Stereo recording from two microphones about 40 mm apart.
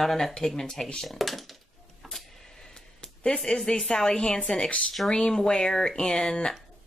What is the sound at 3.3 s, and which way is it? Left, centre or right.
Speech, centre.